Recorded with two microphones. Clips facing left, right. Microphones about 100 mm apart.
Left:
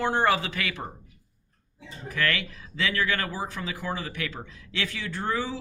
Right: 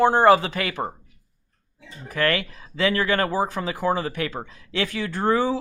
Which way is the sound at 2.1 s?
40° right (ahead or behind).